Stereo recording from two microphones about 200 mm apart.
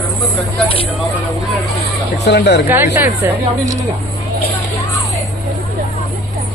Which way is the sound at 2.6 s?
10° right (ahead or behind).